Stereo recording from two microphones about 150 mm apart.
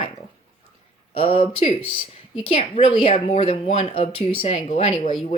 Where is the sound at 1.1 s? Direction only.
35° left (ahead or behind).